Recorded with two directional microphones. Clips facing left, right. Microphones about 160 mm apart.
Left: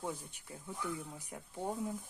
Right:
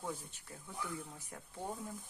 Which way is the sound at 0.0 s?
15° left (ahead or behind).